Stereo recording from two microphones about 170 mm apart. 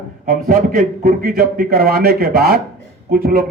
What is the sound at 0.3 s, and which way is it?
A man's voice, 60° right (ahead or behind).